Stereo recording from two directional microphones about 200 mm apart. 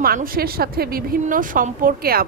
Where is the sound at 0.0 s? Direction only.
45° right (ahead or behind).